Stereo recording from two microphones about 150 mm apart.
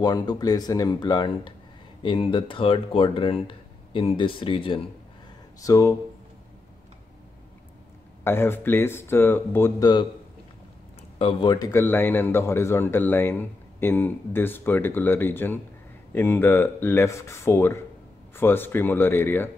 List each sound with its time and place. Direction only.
0.0 s speech: 25° left (ahead or behind)
5.6 s speech: 20° left (ahead or behind)
8.2 s speech: 15° left (ahead or behind)
11.1 s speech: 40° left (ahead or behind)
11.5 s speech: 25° left (ahead or behind)
11.8 s speech: 15° left (ahead or behind)